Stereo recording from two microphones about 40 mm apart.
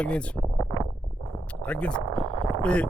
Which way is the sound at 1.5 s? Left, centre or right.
Left.